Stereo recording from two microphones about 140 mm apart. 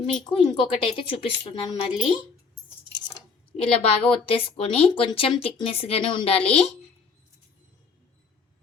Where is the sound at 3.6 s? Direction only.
40° left (ahead or behind).